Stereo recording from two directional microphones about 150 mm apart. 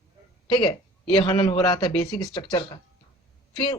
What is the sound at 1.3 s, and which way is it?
Speech, 20° left (ahead or behind).